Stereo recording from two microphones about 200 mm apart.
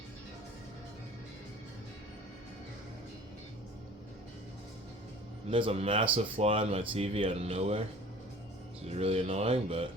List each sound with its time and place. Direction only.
5.5 s speech: 25° right (ahead or behind)
8.9 s speech: 30° right (ahead or behind)